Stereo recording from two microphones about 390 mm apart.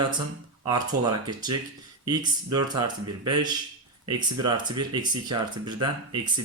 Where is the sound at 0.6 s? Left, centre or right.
Centre.